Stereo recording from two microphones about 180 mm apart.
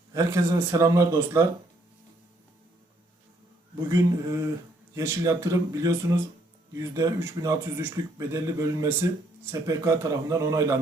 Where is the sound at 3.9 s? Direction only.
20° right (ahead or behind).